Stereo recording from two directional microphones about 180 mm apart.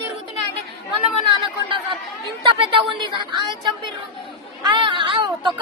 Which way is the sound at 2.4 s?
30° right (ahead or behind).